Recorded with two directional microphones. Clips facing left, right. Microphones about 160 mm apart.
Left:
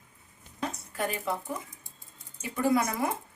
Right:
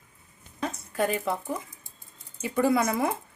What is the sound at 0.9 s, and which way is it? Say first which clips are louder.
Speech: right 5 dB; 20° right (ahead or behind).